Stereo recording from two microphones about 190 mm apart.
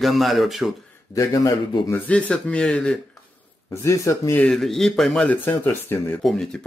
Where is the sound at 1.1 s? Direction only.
20° left (ahead or behind).